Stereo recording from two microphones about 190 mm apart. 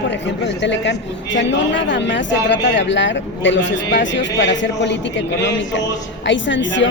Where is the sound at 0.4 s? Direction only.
70° left (ahead or behind).